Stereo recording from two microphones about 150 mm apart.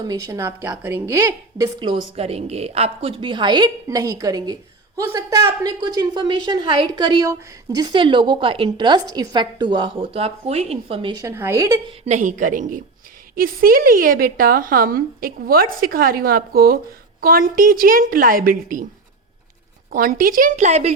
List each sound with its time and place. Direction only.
0.0 s a woman's voice: 25° right (ahead or behind)
11.2 s a woman's voice: 20° right (ahead or behind)
12.0 s a woman's voice: 55° right (ahead or behind)
13.3 s a woman's voice: 75° right (ahead or behind)
19.9 s a woman's voice: 70° right (ahead or behind); by 20.9 s 50° right (ahead or behind)